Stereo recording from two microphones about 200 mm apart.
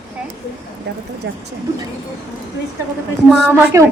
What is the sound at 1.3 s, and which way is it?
Speech, 60° right (ahead or behind).